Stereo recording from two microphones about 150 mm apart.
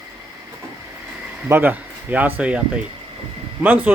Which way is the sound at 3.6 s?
10° right (ahead or behind).